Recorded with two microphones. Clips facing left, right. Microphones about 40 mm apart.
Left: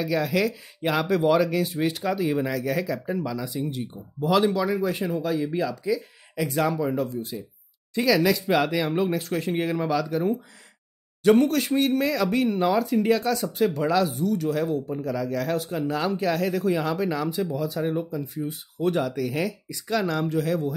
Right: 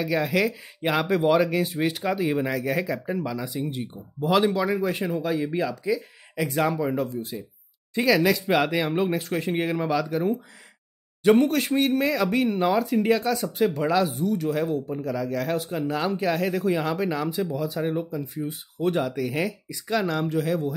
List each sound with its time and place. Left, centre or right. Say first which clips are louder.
0.1 s speech: right 1 dB; centre
8.3 s speech: even; centre
8.9 s speech: even; right